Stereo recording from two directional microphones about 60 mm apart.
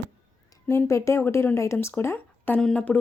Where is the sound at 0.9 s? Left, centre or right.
Left.